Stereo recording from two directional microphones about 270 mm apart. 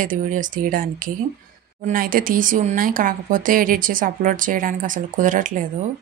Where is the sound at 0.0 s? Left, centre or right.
Right.